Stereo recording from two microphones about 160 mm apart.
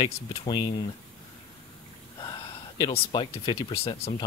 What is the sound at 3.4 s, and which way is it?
Speech, 35° left (ahead or behind).